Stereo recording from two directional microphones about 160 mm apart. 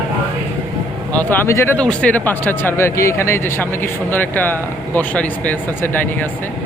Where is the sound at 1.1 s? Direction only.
10° left (ahead or behind).